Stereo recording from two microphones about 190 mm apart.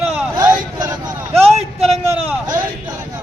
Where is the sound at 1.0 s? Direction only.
35° right (ahead or behind).